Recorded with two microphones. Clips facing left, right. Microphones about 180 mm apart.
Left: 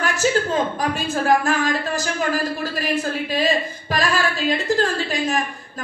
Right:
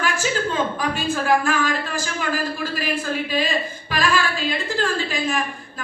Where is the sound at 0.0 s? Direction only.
40° left (ahead or behind).